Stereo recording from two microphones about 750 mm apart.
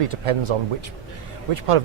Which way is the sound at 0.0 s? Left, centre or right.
Right.